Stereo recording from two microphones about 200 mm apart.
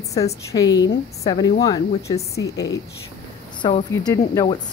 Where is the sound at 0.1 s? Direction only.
15° left (ahead or behind).